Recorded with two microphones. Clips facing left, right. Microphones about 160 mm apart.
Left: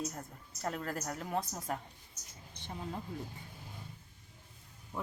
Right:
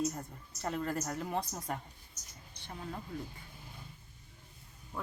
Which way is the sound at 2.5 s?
20° left (ahead or behind).